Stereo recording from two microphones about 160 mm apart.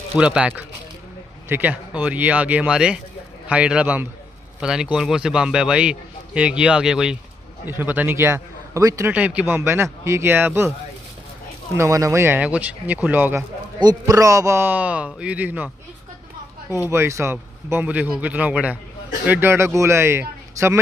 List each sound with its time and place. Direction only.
0.2 s a man's voice: 5° right (ahead or behind)
9.1 s speech: 10° right (ahead or behind)
11.7 s speech: 20° right (ahead or behind)
13.7 s a man's voice: 25° right (ahead or behind)
16.9 s speech: 15° right (ahead or behind)